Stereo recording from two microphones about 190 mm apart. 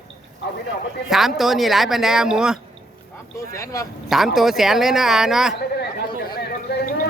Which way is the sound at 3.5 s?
15° left (ahead or behind).